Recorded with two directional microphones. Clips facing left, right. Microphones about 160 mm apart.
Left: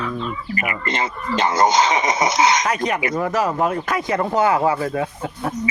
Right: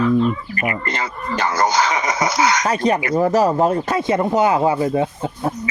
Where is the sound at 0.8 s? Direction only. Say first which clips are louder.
Left 1 dB; 20° left (ahead or behind).